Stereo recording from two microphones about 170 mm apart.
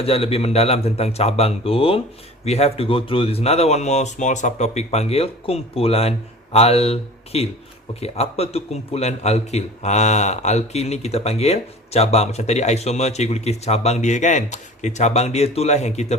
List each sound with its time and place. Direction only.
0.0 s speech: 35° left (ahead or behind)